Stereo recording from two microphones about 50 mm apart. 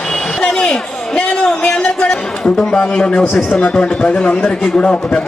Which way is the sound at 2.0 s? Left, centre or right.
Left.